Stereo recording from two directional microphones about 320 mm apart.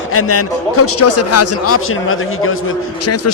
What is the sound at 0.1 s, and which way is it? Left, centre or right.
A man's voice, left.